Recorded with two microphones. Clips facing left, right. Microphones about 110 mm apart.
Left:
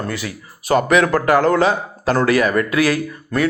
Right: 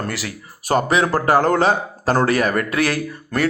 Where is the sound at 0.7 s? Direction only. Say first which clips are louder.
Left 3 dB; 35° right (ahead or behind).